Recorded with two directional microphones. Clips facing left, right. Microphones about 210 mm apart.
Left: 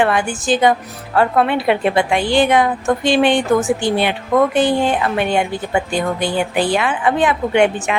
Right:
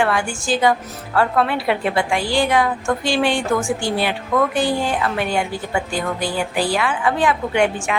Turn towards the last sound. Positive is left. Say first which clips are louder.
# left 3 dB
turn(degrees=20)  # may be behind; listen again after turning